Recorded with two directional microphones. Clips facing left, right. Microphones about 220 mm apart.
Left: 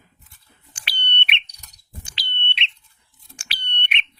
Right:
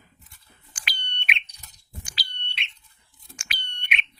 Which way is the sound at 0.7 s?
30° left (ahead or behind).